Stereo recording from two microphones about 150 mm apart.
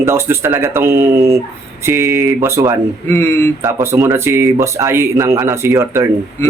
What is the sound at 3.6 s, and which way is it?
Speech, 15° right (ahead or behind).